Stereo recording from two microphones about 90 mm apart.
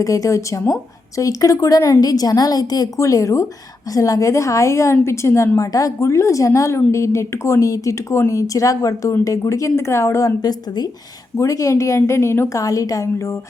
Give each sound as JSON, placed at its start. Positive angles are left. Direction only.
{"t": 0.0, "sound": "speech", "side_deg": 35}